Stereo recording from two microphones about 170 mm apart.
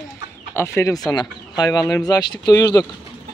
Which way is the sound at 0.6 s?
15° left (ahead or behind).